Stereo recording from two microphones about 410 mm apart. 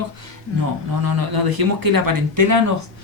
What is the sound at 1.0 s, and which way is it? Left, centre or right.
Speech, right.